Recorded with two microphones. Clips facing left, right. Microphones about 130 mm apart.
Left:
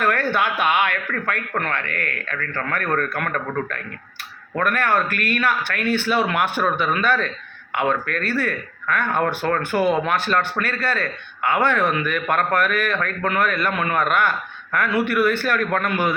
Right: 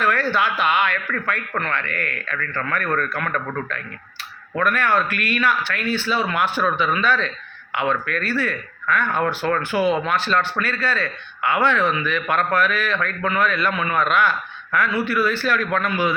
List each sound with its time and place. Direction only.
0.0 s a man's voice: 50° left (ahead or behind)